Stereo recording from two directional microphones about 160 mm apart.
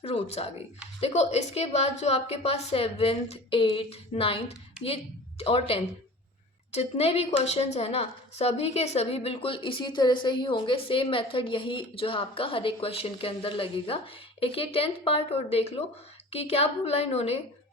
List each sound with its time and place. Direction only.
0.0 s a woman's voice: 40° left (ahead or behind)